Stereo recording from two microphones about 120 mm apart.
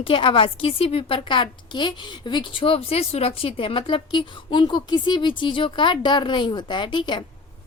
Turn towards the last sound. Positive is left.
turn(degrees=40)  # may be behind; listen again after turning